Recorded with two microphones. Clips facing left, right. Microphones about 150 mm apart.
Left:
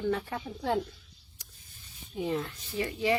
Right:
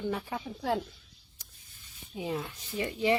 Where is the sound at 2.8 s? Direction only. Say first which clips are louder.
Right 1 dB; 20° right (ahead or behind).